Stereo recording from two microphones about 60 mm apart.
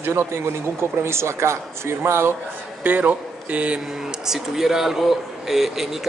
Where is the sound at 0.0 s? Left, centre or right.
Right.